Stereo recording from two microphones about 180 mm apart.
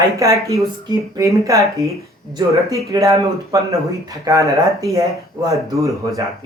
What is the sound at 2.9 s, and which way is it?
Speech, 15° right (ahead or behind).